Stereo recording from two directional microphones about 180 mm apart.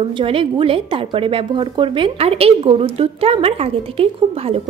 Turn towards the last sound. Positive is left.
turn(degrees=-35)  # may be behind; listen again after turning